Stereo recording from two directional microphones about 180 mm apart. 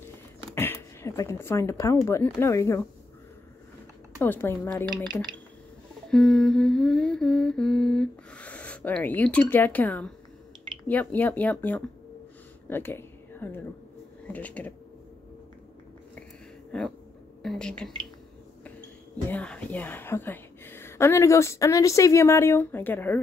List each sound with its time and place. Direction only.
0.6 s speech: 15° left (ahead or behind)
4.2 s speech: 10° left (ahead or behind)
6.0 s humming: 5° left (ahead or behind)
10.9 s speech: 10° left (ahead or behind)
12.6 s a sound: 10° left (ahead or behind)
14.2 s speech: 10° left (ahead or behind)
16.7 s humming: 5° left (ahead or behind)
19.2 s speech: 5° left (ahead or behind)